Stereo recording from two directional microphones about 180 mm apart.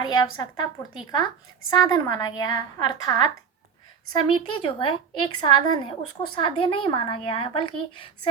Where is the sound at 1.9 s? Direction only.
20° left (ahead or behind).